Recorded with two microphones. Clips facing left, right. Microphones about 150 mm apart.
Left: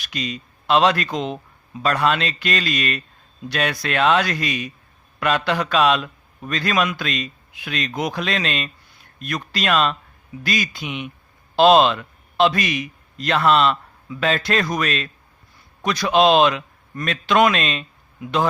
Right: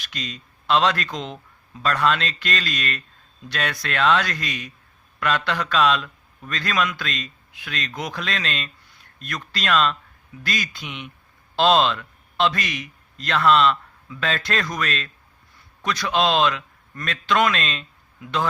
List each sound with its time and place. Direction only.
0.0 s a man's voice: 10° left (ahead or behind)